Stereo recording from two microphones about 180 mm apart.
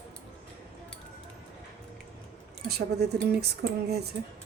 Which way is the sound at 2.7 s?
65° right (ahead or behind).